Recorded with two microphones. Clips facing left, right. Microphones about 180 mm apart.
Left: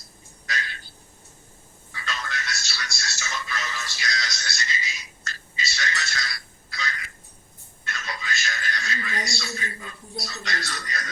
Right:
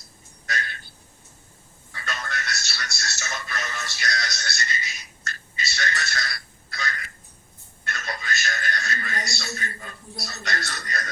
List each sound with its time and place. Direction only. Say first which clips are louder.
1.9 s music: even; 55° right (ahead or behind)
7.9 s television: right 2 dB; 50° right (ahead or behind)